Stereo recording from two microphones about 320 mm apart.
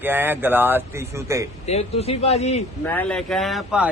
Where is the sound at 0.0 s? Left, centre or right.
Centre.